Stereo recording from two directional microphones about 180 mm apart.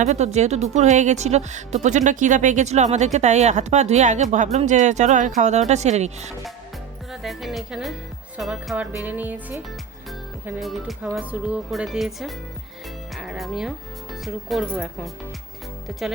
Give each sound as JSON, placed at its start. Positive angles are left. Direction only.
{"t": 0.0, "sound": "speech", "side_deg": -40}
{"t": 7.1, "sound": "a woman's voice", "side_deg": 0}